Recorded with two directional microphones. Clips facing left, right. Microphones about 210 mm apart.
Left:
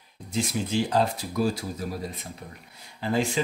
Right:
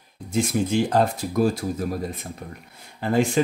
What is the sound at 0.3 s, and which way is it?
Speech, 50° right (ahead or behind).